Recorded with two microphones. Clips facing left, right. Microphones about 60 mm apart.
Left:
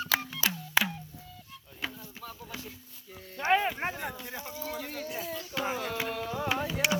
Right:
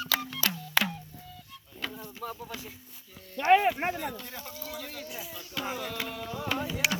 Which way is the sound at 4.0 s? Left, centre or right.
Left.